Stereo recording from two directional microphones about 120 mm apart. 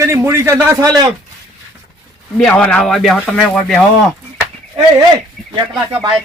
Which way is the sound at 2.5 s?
10° left (ahead or behind).